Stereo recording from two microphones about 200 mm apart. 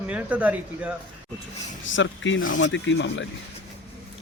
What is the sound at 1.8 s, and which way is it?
Speech, 70° left (ahead or behind).